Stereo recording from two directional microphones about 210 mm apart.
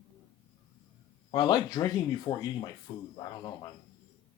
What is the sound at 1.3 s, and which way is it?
Speech, 20° left (ahead or behind).